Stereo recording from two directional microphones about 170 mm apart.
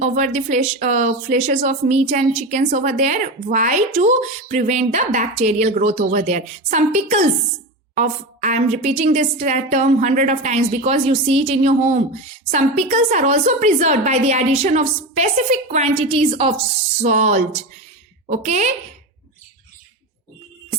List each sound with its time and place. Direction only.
0.0 s a woman's voice: 45° right (ahead or behind)
17.0 s a woman's voice: 45° right (ahead or behind)